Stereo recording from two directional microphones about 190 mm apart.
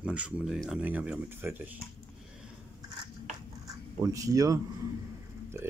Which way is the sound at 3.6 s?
15° right (ahead or behind).